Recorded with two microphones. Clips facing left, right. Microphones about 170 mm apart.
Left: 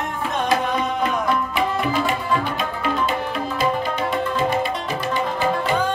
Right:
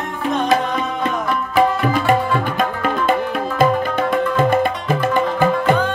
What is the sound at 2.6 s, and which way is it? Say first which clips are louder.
Music: right 4 dB; 50° right (ahead or behind).